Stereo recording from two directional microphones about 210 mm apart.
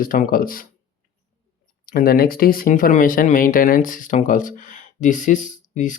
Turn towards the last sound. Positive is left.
turn(degrees=35)  # may be behind; listen again after turning